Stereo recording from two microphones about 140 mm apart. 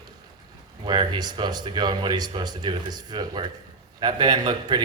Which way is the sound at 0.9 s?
30° right (ahead or behind).